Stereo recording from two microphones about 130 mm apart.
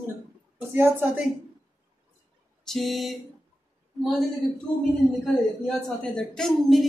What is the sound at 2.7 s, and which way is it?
Speech, centre (ahead or behind).